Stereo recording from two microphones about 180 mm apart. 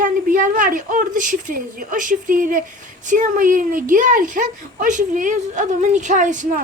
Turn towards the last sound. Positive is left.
turn(degrees=-45)  # may be behind; listen again after turning